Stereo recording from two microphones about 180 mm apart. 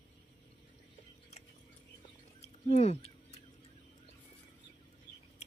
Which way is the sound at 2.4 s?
35° left (ahead or behind).